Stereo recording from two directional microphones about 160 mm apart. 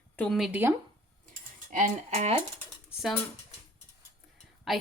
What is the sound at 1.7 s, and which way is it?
Speech, 45° right (ahead or behind).